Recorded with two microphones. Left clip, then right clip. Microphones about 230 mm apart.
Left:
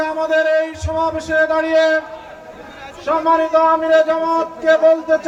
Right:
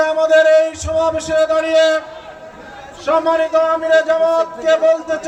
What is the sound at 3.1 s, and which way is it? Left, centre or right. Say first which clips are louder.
A man's voice: even; right.